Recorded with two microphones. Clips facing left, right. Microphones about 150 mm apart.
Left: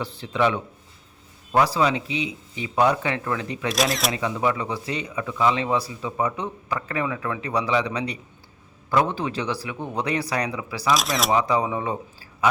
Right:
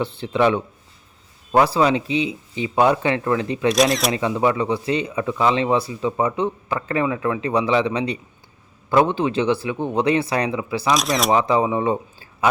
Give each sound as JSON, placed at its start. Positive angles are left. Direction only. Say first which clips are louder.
{"t": 0.0, "sound": "speech", "louder": "right 4 dB", "side_deg": -30}
{"t": 3.7, "sound": "speech", "louder": "right 6 dB", "side_deg": 0}
{"t": 4.2, "sound": "speech", "louder": "right 5 dB", "side_deg": -30}
{"t": 10.8, "sound": "speech", "louder": "right 2 dB", "side_deg": 0}
{"t": 11.3, "sound": "speech", "louder": "right 4 dB", "side_deg": -30}